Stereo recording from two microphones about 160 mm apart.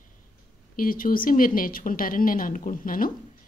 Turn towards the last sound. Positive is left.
turn(degrees=60)  # may be behind; listen again after turning